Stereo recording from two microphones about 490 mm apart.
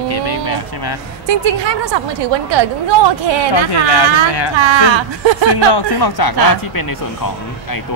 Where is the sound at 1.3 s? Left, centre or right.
Right.